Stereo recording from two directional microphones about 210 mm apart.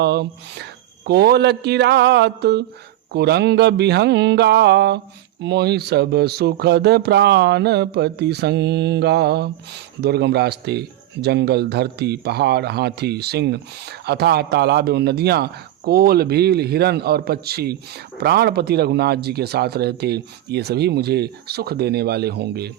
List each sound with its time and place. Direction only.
0.0 s speech: 50° right (ahead or behind)